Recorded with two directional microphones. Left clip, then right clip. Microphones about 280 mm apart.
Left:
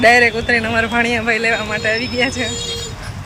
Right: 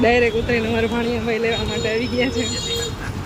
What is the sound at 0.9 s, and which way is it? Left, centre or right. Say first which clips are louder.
Speech: left 6 dB; left.